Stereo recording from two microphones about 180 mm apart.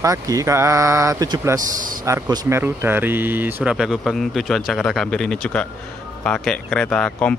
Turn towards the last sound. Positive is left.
turn(degrees=5)  # may be behind; listen again after turning